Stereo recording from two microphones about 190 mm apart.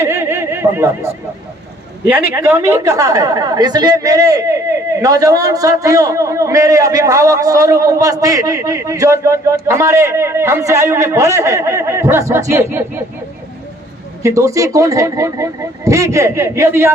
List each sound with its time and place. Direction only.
0.0 s snicker: 15° right (ahead or behind)
2.0 s a woman's voice: 10° right (ahead or behind)
14.2 s a woman's voice: 15° right (ahead or behind)